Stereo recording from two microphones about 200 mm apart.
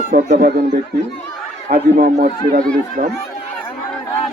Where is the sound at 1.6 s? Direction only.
50° right (ahead or behind).